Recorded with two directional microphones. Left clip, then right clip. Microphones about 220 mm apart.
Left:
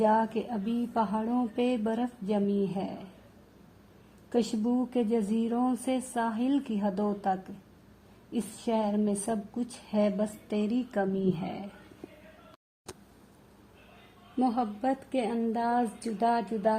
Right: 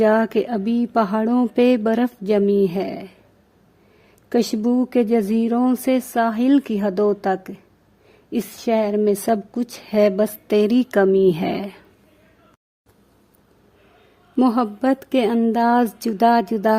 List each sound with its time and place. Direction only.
0.0 s speech: 55° right (ahead or behind)
4.3 s a woman's voice: 50° right (ahead or behind)
14.3 s a woman's voice: 55° right (ahead or behind)